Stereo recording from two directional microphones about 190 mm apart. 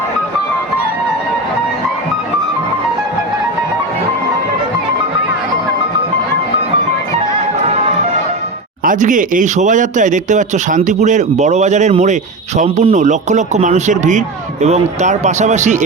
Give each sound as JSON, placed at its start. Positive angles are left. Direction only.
{"t": 8.8, "sound": "speech", "side_deg": -45}